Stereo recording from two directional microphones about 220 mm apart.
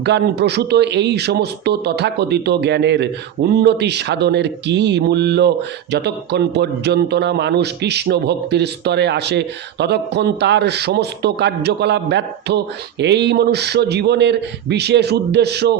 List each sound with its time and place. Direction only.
0.0 s a man's voice: 50° right (ahead or behind)